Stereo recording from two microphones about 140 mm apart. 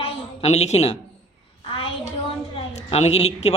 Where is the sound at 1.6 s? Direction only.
40° left (ahead or behind).